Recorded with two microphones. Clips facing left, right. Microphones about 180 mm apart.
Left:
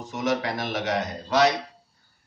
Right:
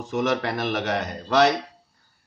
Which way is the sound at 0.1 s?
60° right (ahead or behind).